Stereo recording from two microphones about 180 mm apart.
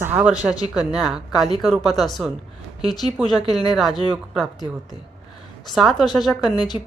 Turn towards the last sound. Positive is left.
turn(degrees=25)  # may be behind; listen again after turning